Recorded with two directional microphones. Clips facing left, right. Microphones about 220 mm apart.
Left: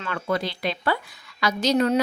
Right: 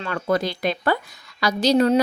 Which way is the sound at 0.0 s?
40° right (ahead or behind).